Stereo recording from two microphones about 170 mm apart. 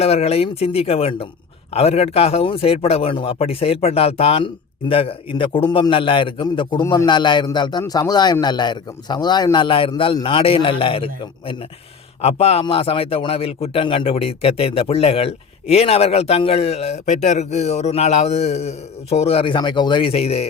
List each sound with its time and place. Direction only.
0.0 s a man's voice: 35° left (ahead or behind)